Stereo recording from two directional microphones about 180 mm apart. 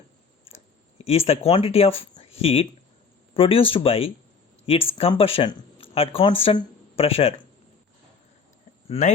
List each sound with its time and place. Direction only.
1.0 s speech: 35° left (ahead or behind)
8.9 s speech: 40° left (ahead or behind)